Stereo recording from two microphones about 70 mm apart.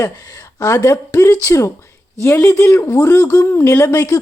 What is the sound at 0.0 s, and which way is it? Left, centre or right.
Speech, left.